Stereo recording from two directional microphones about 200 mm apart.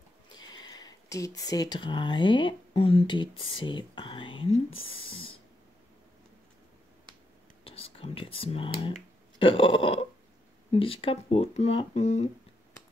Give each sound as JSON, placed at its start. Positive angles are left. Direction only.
{"t": 0.4, "sound": "speech", "side_deg": 20}
{"t": 7.6, "sound": "speech", "side_deg": 30}